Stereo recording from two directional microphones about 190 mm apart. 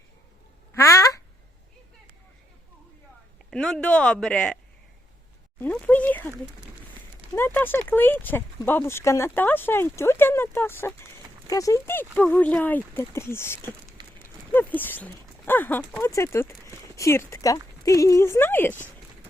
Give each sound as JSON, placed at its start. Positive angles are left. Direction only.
{"t": 0.8, "sound": "a sound", "side_deg": 15}
{"t": 3.5, "sound": "speech", "side_deg": 5}
{"t": 5.5, "sound": "speech", "side_deg": 10}
{"t": 7.3, "sound": "speech", "side_deg": 10}